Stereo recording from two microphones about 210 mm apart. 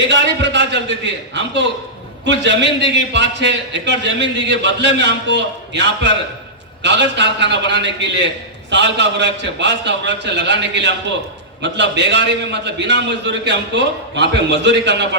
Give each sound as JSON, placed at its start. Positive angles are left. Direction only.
{"t": 0.1, "sound": "a man's voice", "side_deg": -55}